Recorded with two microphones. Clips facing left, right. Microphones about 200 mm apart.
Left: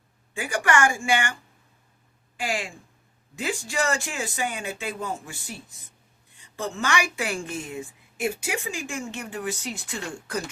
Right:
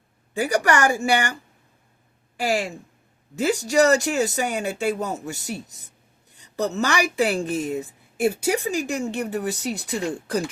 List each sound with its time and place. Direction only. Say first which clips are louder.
0.3 s a woman's voice: right 3 dB; 40° right (ahead or behind)
2.4 s a woman's voice: right 6 dB; 40° right (ahead or behind)